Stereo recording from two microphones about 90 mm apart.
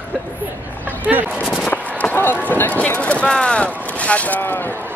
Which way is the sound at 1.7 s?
20° left (ahead or behind).